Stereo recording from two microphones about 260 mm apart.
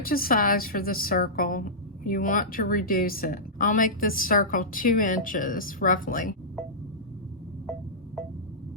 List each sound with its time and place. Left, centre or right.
0.0 s speech: left